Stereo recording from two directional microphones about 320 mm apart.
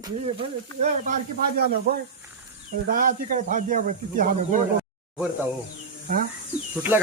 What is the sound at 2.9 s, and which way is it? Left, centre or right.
Speech, right.